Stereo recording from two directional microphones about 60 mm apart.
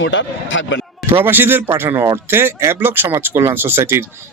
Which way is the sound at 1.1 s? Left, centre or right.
Right.